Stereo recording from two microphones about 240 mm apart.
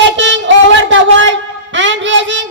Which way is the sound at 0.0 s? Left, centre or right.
Right.